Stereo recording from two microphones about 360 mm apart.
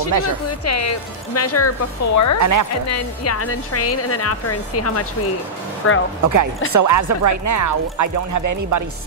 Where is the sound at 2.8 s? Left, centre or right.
Left.